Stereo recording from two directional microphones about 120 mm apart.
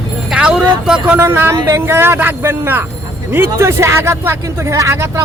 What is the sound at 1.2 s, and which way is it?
Speech, 20° right (ahead or behind).